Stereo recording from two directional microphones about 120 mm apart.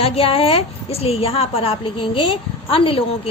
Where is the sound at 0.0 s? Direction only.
55° left (ahead or behind).